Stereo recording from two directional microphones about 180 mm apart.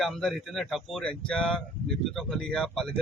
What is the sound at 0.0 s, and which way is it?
Speech, centre (ahead or behind).